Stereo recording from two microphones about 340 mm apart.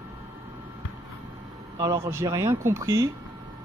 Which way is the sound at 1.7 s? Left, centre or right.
Centre.